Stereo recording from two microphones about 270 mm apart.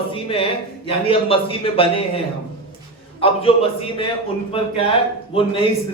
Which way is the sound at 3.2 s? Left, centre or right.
Left.